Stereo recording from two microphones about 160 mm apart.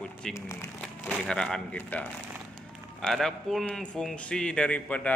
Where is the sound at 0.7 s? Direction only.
5° left (ahead or behind).